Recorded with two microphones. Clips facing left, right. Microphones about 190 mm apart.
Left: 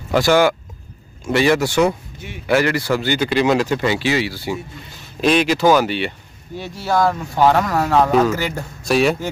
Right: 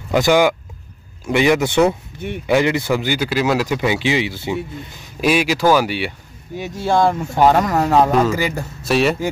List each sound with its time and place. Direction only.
0.1 s speech: 15° right (ahead or behind)
5.0 s speech: 10° right (ahead or behind)
6.8 s speech: 25° right (ahead or behind)
8.1 s speech: centre (ahead or behind)
8.4 s speech: 10° right (ahead or behind)